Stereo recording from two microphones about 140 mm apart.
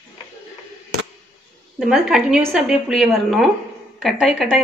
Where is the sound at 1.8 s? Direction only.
5° right (ahead or behind).